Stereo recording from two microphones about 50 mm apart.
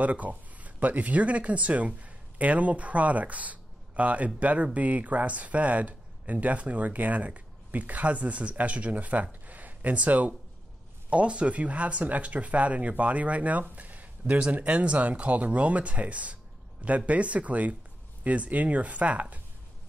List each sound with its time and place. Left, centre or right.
0.0 s speech: right